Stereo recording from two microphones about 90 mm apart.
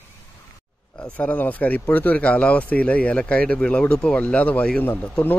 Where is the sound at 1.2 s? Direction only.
20° left (ahead or behind).